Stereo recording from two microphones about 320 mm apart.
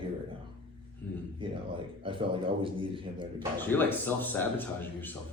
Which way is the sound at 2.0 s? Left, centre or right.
Centre.